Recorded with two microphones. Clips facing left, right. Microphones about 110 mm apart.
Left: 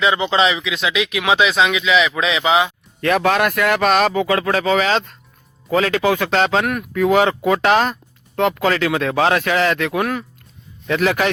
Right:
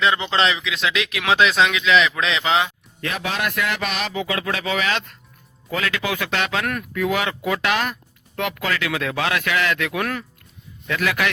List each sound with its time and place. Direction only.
0.0 s speech: 5° left (ahead or behind)
3.0 s speech: 55° left (ahead or behind); by 10.0 s 35° left (ahead or behind)
10.0 s speech: 15° left (ahead or behind)
10.8 s a man's voice: 30° left (ahead or behind)